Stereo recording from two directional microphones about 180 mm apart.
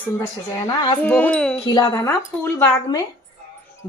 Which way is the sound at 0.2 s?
20° left (ahead or behind).